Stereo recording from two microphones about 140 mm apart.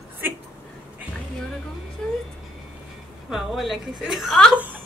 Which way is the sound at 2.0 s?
5° left (ahead or behind).